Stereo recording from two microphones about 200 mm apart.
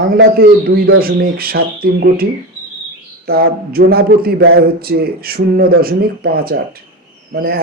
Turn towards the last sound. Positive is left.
turn(degrees=-50)  # may be behind; listen again after turning